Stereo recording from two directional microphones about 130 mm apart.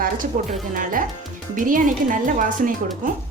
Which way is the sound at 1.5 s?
90° right.